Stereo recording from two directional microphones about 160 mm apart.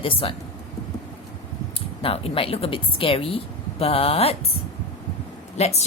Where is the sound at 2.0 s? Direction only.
35° left (ahead or behind).